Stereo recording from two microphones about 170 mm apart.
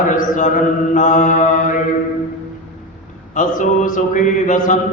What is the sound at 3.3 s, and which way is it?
Mantra, 50° left (ahead or behind).